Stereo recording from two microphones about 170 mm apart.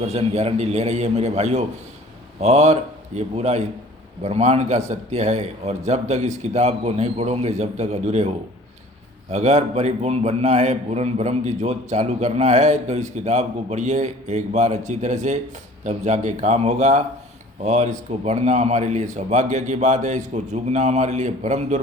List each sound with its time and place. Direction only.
0.0 s a man's voice: 40° right (ahead or behind)